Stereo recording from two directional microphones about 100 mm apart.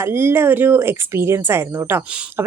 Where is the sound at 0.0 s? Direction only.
25° right (ahead or behind).